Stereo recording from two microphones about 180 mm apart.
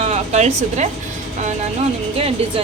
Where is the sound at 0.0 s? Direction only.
40° right (ahead or behind).